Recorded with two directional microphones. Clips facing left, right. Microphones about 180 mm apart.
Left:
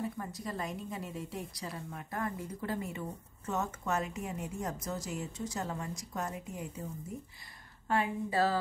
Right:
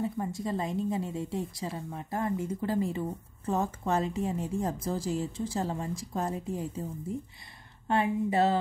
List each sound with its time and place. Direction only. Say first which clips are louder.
0.0 s a woman's voice: right 6 dB; 25° right (ahead or behind)
7.9 s a woman's voice: right 5 dB; 25° right (ahead or behind)